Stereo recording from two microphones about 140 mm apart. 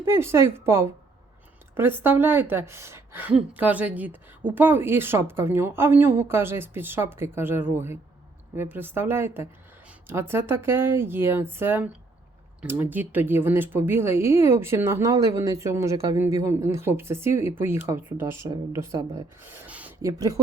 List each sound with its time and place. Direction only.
0.0 s a woman's voice: 20° right (ahead or behind)
20.0 s speech: 25° right (ahead or behind)